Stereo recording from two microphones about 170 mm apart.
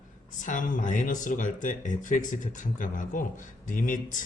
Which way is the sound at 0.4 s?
50° left (ahead or behind).